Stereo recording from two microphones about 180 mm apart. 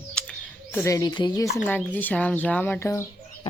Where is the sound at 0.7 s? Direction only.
15° left (ahead or behind).